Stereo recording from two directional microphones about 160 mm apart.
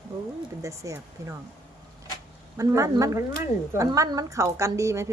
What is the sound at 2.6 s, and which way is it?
A woman's voice, 20° right (ahead or behind).